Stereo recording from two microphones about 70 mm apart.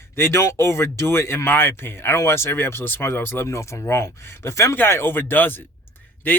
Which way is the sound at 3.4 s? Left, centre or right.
Left.